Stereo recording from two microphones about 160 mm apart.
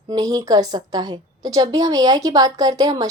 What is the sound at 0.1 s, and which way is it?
A woman's voice, 25° right (ahead or behind).